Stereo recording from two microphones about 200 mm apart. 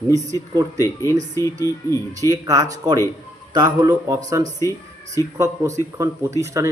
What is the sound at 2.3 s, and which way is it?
A man's voice, 20° right (ahead or behind).